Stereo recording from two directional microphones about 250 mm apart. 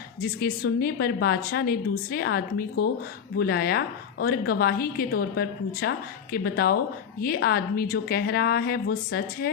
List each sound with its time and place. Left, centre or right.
0.2 s a woman's voice: left